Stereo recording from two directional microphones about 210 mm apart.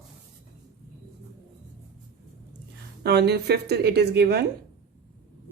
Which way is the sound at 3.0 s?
50° right (ahead or behind).